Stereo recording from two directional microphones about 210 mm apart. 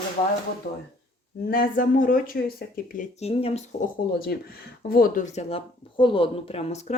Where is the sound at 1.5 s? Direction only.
40° left (ahead or behind).